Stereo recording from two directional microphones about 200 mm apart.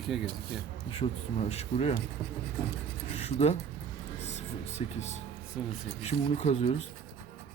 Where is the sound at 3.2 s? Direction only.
30° left (ahead or behind).